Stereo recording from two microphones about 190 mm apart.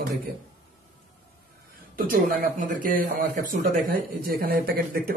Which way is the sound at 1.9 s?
50° right (ahead or behind).